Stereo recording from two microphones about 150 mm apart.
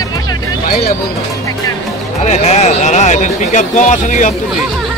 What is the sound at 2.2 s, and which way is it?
Speech, 45° left (ahead or behind).